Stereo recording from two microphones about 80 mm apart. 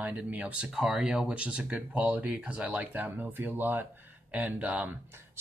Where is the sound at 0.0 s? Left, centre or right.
Centre.